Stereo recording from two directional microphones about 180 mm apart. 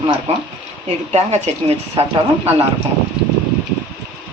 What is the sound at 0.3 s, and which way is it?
A woman's voice, 35° right (ahead or behind).